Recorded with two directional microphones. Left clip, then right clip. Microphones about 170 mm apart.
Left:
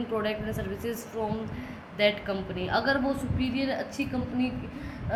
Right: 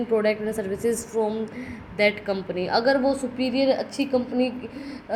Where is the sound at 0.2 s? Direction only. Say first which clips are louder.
Right 7 dB; 35° right (ahead or behind).